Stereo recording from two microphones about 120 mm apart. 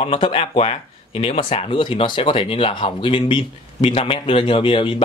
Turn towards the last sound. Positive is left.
turn(degrees=45)  # may be behind; listen again after turning